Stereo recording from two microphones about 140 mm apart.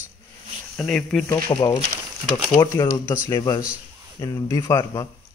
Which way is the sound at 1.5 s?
30° left (ahead or behind).